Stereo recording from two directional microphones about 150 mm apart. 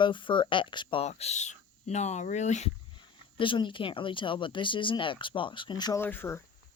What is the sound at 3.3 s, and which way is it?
Speech, 35° left (ahead or behind).